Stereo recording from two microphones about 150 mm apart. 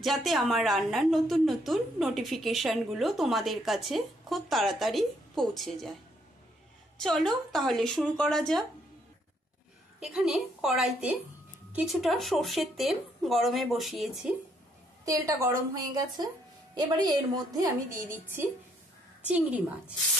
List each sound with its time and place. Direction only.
0.0 s a woman's voice: centre (ahead or behind)
7.0 s a woman's voice: centre (ahead or behind)
9.9 s a woman's voice: 5° right (ahead or behind)
15.0 s a woman's voice: 25° right (ahead or behind)
16.7 s a woman's voice: 25° right (ahead or behind)
18.1 s a woman's voice: 15° right (ahead or behind)